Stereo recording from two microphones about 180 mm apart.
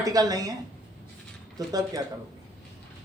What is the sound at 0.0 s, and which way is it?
Speech, 20° right (ahead or behind).